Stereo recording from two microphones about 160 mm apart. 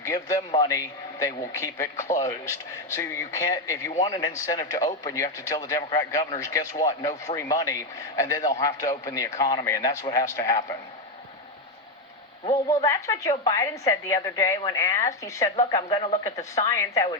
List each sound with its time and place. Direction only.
0.0 s a man's voice: 20° left (ahead or behind)
12.6 s a man's voice: 20° left (ahead or behind)